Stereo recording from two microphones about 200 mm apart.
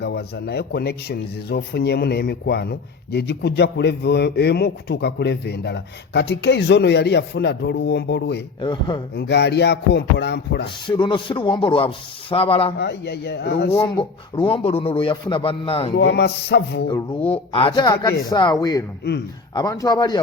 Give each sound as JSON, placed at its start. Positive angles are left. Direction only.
{"t": 0.0, "sound": "speech", "side_deg": 55}
{"t": 8.6, "sound": "a man's voice", "side_deg": 20}
{"t": 9.1, "sound": "speech", "side_deg": 55}
{"t": 10.8, "sound": "a man's voice", "side_deg": 25}
{"t": 12.8, "sound": "speech", "side_deg": 55}
{"t": 13.7, "sound": "a man's voice", "side_deg": 20}
{"t": 16.0, "sound": "speech", "side_deg": 60}
{"t": 17.2, "sound": "a man's voice", "side_deg": 25}